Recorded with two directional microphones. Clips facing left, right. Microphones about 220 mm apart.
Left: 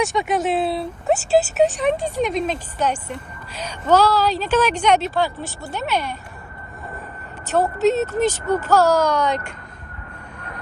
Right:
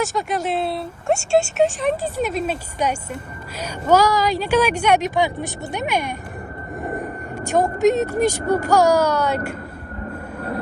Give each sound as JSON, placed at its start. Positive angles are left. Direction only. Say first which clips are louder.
{"t": 0.0, "sound": "speech", "louder": "left 2 dB", "side_deg": 0}
{"t": 6.8, "sound": "vehicle", "louder": "right 9 dB", "side_deg": -45}
{"t": 7.4, "sound": "speech", "louder": "right 1 dB", "side_deg": -10}